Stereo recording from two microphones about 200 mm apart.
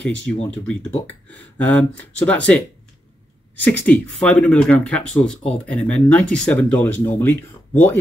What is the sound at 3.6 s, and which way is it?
Speech, 5° left (ahead or behind).